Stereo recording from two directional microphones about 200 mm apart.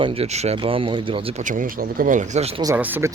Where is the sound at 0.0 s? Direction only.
30° right (ahead or behind).